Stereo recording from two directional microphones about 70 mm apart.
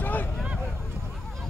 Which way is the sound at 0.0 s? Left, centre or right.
Left.